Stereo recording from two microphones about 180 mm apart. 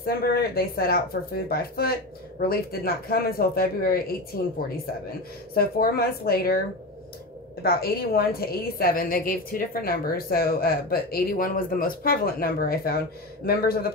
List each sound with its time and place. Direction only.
0.0 s a woman's voice: 60° left (ahead or behind)
7.6 s a woman's voice: 55° left (ahead or behind)